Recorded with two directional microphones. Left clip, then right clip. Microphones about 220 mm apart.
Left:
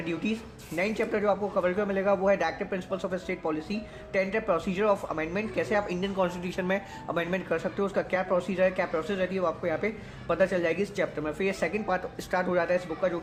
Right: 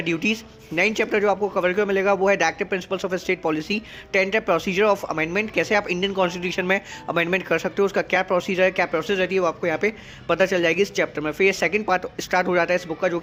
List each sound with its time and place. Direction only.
0.0 s speech: 35° right (ahead or behind)